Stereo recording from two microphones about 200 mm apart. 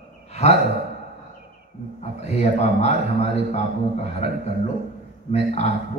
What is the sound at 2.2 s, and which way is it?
A man's voice, 35° left (ahead or behind).